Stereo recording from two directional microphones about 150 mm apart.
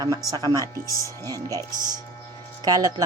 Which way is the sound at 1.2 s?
25° right (ahead or behind).